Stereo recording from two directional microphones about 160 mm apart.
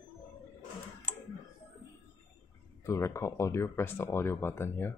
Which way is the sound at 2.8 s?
20° left (ahead or behind).